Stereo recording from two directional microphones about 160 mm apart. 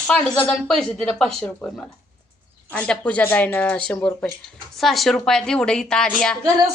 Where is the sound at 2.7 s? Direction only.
5° left (ahead or behind).